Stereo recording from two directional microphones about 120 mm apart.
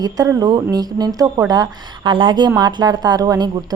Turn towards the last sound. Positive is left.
turn(degrees=-35)  # may be behind; listen again after turning